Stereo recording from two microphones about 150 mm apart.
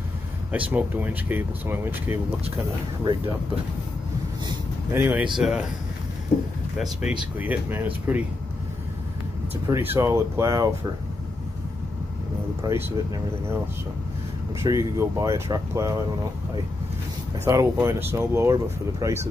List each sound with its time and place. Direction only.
0.5 s speech: 10° right (ahead or behind)
4.9 s speech: 10° right (ahead or behind)
7.1 s speech: 10° right (ahead or behind)
9.7 s speech: 20° right (ahead or behind)
12.6 s speech: 15° right (ahead or behind)
14.6 s speech: 20° right (ahead or behind)
17.5 s speech: 20° right (ahead or behind)